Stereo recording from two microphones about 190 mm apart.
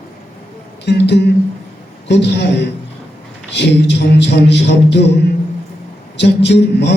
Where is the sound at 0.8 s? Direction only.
60° left (ahead or behind).